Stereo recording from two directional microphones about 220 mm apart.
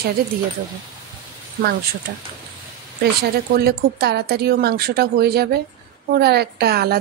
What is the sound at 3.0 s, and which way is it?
A woman's voice, 45° right (ahead or behind).